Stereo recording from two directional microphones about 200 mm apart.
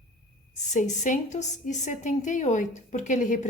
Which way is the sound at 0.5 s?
35° left (ahead or behind).